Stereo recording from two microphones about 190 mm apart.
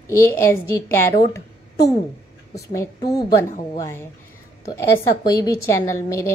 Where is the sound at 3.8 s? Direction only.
15° left (ahead or behind).